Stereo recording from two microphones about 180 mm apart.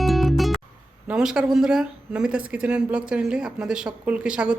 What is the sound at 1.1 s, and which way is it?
Speech, 5° right (ahead or behind).